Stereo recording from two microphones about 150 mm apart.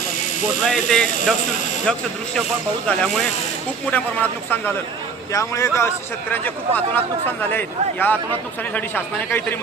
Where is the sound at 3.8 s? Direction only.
10° left (ahead or behind).